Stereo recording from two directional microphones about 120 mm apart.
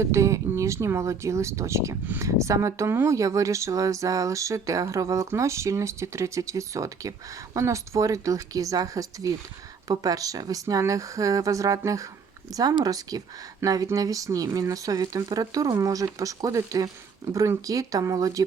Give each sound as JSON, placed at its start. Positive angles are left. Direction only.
{"t": 0.0, "sound": "speech", "side_deg": -25}